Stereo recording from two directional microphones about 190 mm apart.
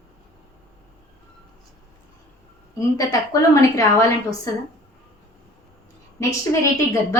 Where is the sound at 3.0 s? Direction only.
15° left (ahead or behind).